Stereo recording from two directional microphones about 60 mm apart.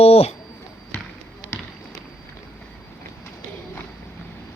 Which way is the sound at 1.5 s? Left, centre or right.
Left.